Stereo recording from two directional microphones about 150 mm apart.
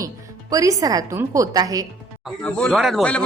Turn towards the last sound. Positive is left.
turn(degrees=5)  # may be behind; listen again after turning